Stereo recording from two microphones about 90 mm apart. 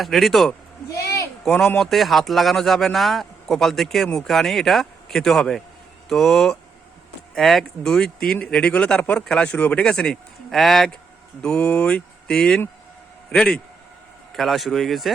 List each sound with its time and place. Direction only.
0.0 s speech: centre (ahead or behind)
0.9 s a sound: 35° left (ahead or behind)
1.5 s speech: 5° left (ahead or behind)
11.4 s speech: 15° left (ahead or behind)